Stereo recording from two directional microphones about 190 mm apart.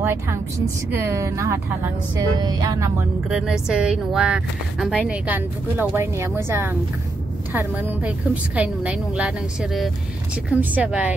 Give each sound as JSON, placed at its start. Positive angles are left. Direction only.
{"t": 0.0, "sound": "a woman's voice", "side_deg": -15}
{"t": 3.3, "sound": "a woman's voice", "side_deg": 0}